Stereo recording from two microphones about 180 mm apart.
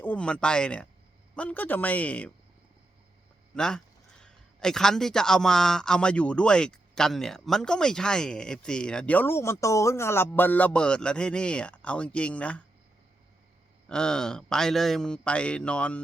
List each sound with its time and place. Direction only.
0.0 s a man's voice: 5° left (ahead or behind)
3.5 s a man's voice: 5° left (ahead or behind)
13.8 s a man's voice: 5° left (ahead or behind)